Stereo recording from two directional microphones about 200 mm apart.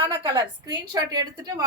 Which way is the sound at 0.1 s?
25° right (ahead or behind).